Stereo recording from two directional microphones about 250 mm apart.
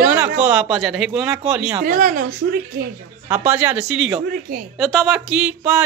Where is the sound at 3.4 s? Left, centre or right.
Centre.